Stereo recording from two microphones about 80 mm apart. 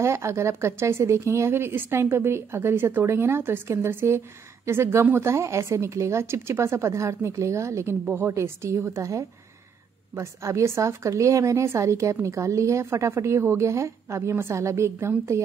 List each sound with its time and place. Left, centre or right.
0.0 s a woman's voice: right